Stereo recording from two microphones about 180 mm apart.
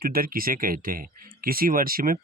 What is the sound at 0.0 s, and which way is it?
Speech, 55° right (ahead or behind).